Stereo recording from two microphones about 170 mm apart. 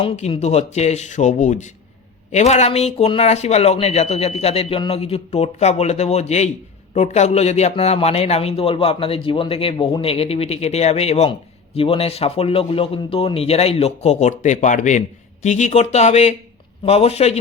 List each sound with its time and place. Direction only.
0.0 s a man's voice: 35° left (ahead or behind)